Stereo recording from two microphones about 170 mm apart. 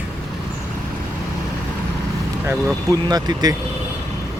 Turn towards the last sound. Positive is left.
turn(degrees=-25)  # may be behind; listen again after turning